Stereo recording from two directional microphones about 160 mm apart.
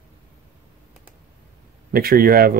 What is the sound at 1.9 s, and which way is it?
Speech, 65° right (ahead or behind).